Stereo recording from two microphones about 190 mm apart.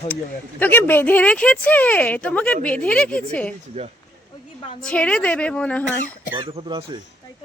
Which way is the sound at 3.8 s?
30° right (ahead or behind).